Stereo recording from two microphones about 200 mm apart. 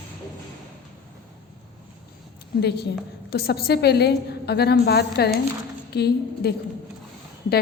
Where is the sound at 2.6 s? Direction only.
55° left (ahead or behind).